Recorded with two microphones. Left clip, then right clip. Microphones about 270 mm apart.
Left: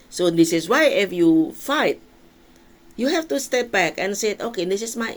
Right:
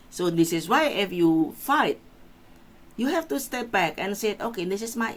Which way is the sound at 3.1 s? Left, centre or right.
Right.